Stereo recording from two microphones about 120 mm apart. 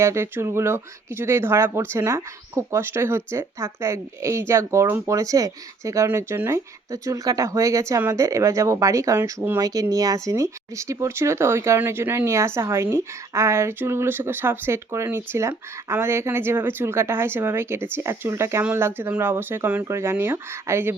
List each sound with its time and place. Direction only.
0.0 s speech: 25° right (ahead or behind)